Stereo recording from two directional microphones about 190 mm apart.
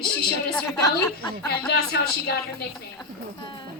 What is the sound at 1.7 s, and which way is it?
Speech, 55° left (ahead or behind).